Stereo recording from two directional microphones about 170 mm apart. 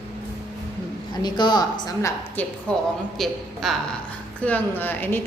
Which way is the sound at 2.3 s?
10° left (ahead or behind).